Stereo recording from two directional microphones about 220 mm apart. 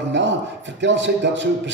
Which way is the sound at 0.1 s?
55° right (ahead or behind).